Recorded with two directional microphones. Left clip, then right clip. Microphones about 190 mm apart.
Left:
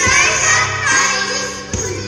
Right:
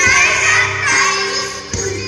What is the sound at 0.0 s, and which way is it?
Music, 50° left (ahead or behind).